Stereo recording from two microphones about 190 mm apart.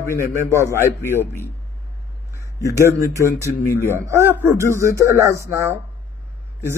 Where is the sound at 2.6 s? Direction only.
15° right (ahead or behind).